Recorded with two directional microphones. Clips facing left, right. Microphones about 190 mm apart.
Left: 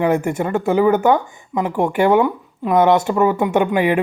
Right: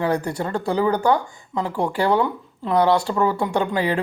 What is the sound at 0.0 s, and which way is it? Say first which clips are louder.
Speech: left 5 dB; 20° left (ahead or behind).